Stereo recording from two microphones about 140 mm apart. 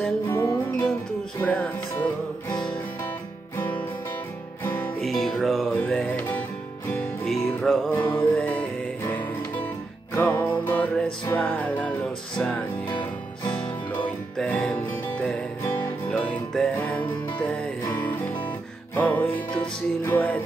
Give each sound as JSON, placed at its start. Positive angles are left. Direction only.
{"t": 0.3, "sound": "music", "side_deg": 15}
{"t": 1.4, "sound": "music", "side_deg": 5}
{"t": 4.6, "sound": "music", "side_deg": 5}
{"t": 10.1, "sound": "music", "side_deg": 15}
{"t": 14.0, "sound": "music", "side_deg": 10}